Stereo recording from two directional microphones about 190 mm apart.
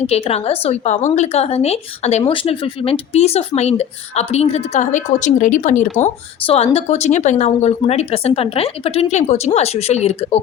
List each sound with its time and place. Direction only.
0.1 s a woman's voice: 30° left (ahead or behind)